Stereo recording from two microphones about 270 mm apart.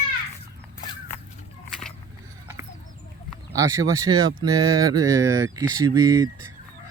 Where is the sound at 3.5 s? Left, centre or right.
Centre.